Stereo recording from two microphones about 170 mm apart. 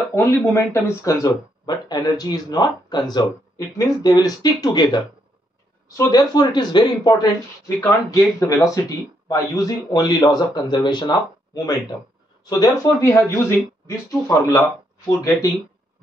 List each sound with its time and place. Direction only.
0.1 s speech: 15° left (ahead or behind)